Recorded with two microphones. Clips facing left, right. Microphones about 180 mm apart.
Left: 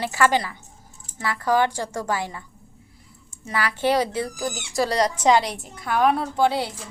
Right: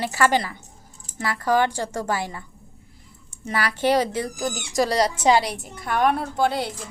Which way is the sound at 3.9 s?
40° right (ahead or behind).